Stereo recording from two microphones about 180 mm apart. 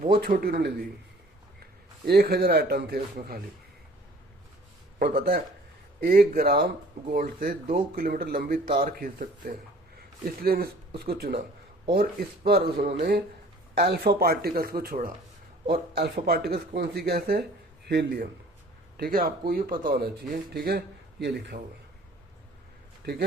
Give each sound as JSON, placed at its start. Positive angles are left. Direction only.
{"t": 0.0, "sound": "speech", "side_deg": -55}
{"t": 2.0, "sound": "speech", "side_deg": -60}
{"t": 4.9, "sound": "speech", "side_deg": -55}
{"t": 12.5, "sound": "speech", "side_deg": -60}
{"t": 16.2, "sound": "speech", "side_deg": -60}
{"t": 23.0, "sound": "speech", "side_deg": -65}